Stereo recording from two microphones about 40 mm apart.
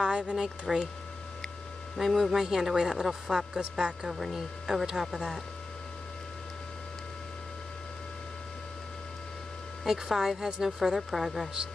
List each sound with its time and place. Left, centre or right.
0.0 s speech: right
0.7 s a woman's voice: centre
2.0 s a woman's voice: centre
4.1 s a woman's voice: centre
9.8 s a woman's voice: centre